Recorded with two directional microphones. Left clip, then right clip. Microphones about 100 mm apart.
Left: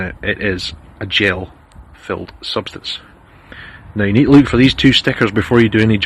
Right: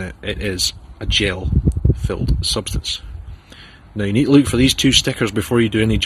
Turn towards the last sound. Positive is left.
turn(degrees=-20)  # may be behind; listen again after turning